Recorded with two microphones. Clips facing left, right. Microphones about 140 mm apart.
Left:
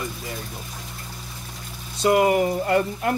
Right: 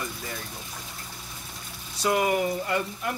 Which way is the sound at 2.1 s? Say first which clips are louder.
Left 6 dB; 35° left (ahead or behind).